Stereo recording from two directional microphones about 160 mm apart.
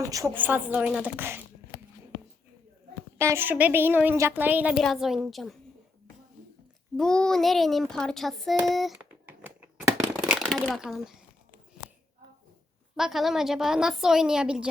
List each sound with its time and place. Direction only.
0.0 s a woman's voice: 20° right (ahead or behind)
3.2 s a woman's voice: 15° right (ahead or behind); by 5.5 s centre (ahead or behind)
6.9 s a woman's voice: 5° left (ahead or behind)
9.4 s a sound: 20° right (ahead or behind)
10.2 s shuffling cards: centre (ahead or behind)
10.8 s a woman's voice: 5° right (ahead or behind)
13.0 s a woman's voice: centre (ahead or behind)